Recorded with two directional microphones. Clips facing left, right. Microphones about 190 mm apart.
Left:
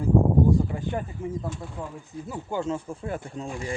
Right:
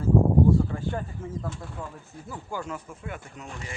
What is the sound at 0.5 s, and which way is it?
Speech, 15° left (ahead or behind).